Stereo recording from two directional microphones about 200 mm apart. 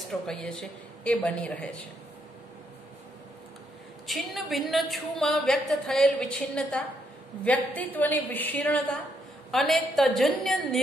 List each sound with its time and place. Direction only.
0.3 s a woman's voice: 5° left (ahead or behind)
4.1 s a woman's voice: centre (ahead or behind)